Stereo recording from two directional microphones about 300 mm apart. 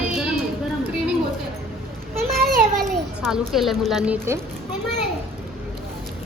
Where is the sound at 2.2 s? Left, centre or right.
Right.